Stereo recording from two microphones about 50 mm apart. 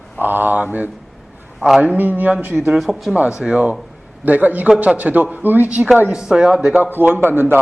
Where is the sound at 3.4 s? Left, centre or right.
Centre.